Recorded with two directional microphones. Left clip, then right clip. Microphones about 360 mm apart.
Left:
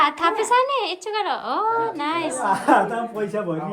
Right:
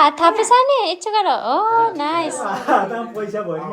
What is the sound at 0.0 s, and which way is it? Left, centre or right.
A woman's voice, centre.